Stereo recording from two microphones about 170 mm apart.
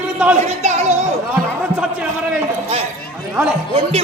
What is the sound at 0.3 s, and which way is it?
Speech, 40° right (ahead or behind).